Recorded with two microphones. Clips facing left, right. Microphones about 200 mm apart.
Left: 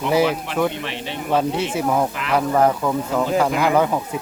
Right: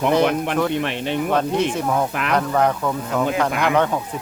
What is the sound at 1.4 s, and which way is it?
Speech, 5° left (ahead or behind).